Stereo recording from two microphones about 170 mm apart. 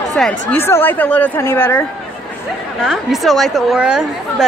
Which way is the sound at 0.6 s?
15° left (ahead or behind).